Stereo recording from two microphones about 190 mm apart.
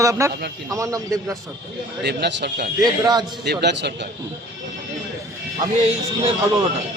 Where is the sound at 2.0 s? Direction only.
60° right (ahead or behind).